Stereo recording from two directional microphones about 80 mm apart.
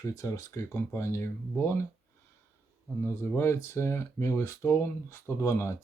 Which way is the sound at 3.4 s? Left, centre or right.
Left.